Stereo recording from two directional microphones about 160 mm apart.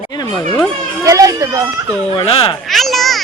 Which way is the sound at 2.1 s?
35° left (ahead or behind).